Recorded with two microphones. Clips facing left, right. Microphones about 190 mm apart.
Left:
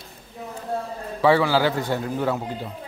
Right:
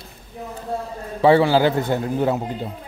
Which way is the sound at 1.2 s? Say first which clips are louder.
Right 4 dB; 25° right (ahead or behind).